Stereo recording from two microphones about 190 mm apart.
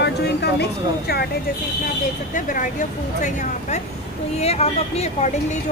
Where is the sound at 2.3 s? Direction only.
45° left (ahead or behind).